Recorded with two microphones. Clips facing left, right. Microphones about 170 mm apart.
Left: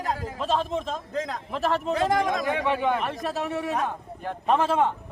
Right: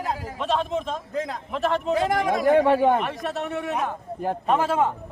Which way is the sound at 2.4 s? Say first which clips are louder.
Right 7 dB; 50° right (ahead or behind).